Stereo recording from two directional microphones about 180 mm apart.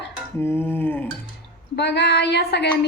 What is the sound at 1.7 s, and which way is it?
Speech, 70° left (ahead or behind).